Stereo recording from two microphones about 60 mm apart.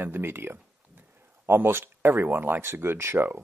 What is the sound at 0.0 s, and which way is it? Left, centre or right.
Speech, right.